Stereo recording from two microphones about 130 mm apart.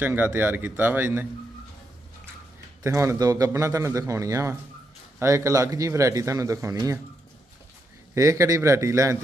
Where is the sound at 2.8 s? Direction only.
20° right (ahead or behind).